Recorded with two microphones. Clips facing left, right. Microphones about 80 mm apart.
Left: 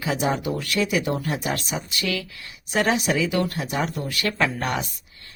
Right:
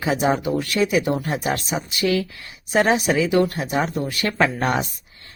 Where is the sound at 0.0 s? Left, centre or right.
Right.